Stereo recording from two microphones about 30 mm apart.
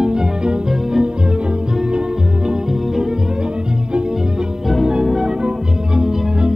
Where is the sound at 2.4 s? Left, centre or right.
Centre.